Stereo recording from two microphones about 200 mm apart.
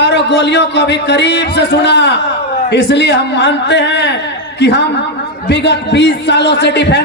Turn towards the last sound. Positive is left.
turn(degrees=60)  # may be behind; listen again after turning